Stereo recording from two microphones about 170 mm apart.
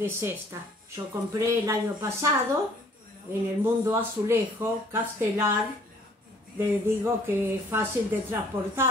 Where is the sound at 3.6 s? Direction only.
15° right (ahead or behind).